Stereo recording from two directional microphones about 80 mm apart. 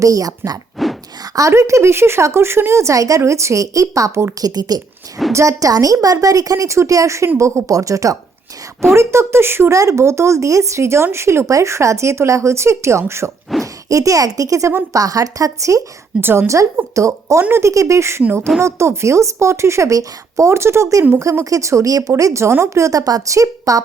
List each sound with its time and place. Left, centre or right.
0.0 s a woman's voice: right
4.4 s a woman's voice: right
5.3 s a woman's voice: right
16.2 s a woman's voice: right
16.9 s speech: right